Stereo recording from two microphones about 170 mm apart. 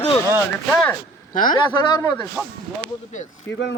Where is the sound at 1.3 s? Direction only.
55° left (ahead or behind).